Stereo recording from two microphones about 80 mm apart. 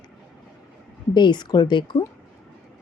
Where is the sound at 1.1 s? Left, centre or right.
Left.